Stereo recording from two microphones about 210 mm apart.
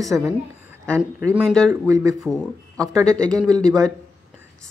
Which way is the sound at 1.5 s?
5° left (ahead or behind).